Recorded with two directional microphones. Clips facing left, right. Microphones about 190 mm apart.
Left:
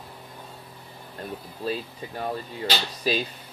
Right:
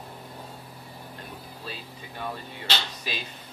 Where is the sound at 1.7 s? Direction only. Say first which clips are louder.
Left 13 dB; 40° left (ahead or behind).